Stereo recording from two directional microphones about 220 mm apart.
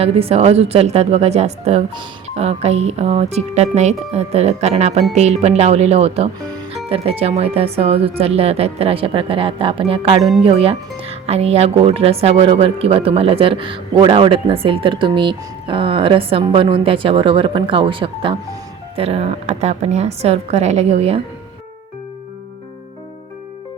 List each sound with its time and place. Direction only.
0.0 s speech: 25° right (ahead or behind)